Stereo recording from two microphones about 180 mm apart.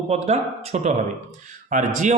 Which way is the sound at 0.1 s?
35° right (ahead or behind).